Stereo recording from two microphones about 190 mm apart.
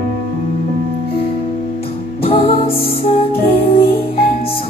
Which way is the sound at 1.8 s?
30° left (ahead or behind).